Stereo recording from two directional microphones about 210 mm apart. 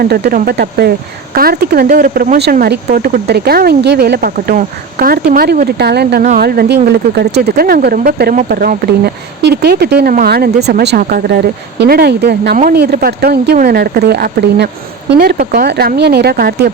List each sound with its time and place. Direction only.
0.0 s speech: 45° right (ahead or behind)